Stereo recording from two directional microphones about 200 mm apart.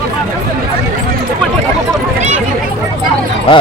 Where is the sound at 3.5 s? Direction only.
30° left (ahead or behind).